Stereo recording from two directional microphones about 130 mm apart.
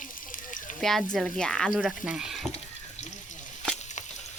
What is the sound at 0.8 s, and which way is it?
Speech, centre (ahead or behind).